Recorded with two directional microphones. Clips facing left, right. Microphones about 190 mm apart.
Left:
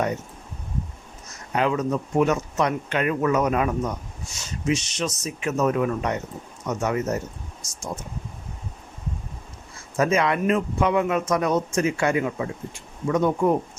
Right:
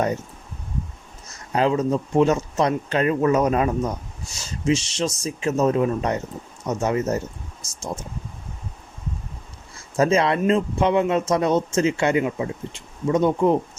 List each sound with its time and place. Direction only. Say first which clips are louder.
1.5 s a man's voice: right 3 dB; 30° right (ahead or behind)
10.0 s a man's voice: right 2 dB; 30° right (ahead or behind)